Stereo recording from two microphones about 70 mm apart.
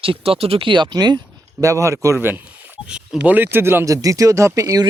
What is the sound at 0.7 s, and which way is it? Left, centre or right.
Speech, right.